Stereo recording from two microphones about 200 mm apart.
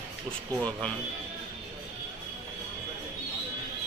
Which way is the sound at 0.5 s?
15° right (ahead or behind).